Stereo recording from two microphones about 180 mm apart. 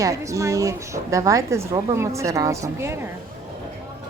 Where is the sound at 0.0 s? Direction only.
15° right (ahead or behind).